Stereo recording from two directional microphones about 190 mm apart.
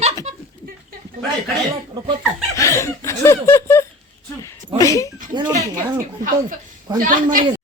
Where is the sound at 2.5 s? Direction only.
15° left (ahead or behind).